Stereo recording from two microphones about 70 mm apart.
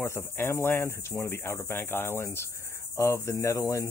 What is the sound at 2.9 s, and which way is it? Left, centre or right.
Cricket, left.